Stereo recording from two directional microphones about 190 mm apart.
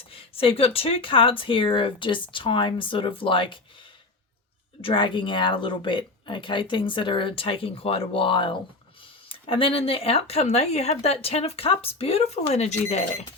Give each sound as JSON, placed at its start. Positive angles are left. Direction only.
{"t": 0.0, "sound": "speech", "side_deg": 30}
{"t": 4.8, "sound": "speech", "side_deg": 25}